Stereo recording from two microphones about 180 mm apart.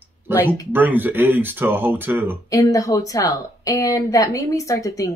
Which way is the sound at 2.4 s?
20° left (ahead or behind).